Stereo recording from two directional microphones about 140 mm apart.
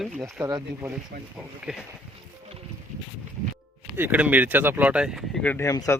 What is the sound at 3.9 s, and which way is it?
Speech, 15° right (ahead or behind).